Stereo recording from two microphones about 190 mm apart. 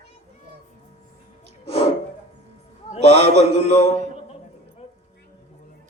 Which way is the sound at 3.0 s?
65° right (ahead or behind).